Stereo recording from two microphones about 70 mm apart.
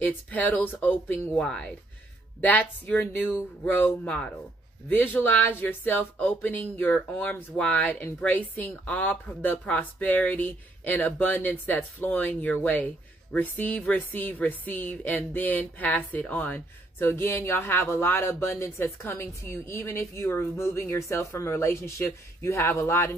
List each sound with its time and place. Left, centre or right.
0.3 s speech: left
1.4 s speech: centre
3.0 s speech: left
4.0 s speech: centre
4.8 s speech: left